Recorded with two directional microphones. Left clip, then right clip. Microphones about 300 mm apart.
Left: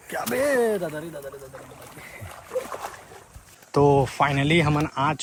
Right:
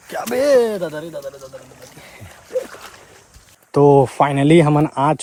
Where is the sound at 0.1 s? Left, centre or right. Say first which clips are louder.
Right 8 dB; centre.